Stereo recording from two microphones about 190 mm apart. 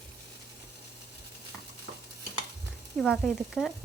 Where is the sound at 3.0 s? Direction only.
Centre (ahead or behind).